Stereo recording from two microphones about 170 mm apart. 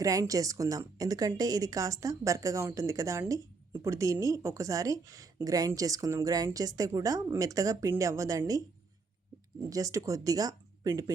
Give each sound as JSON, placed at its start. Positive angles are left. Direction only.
{"t": 0.0, "sound": "speech", "side_deg": -20}
{"t": 9.6, "sound": "speech", "side_deg": -20}